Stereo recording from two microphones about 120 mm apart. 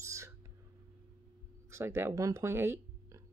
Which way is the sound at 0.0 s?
25° right (ahead or behind).